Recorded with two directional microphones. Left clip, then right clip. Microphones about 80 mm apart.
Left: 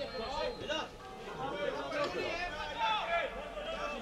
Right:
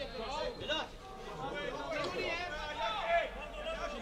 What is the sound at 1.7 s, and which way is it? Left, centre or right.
Chatter, right.